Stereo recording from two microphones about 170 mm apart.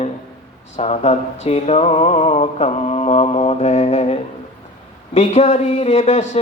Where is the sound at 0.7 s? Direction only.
40° left (ahead or behind).